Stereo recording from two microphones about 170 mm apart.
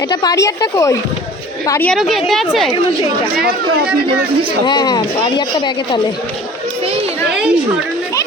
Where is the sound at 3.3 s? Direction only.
65° right (ahead or behind).